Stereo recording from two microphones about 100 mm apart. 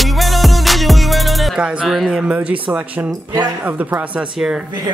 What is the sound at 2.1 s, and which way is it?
Speech, 10° right (ahead or behind).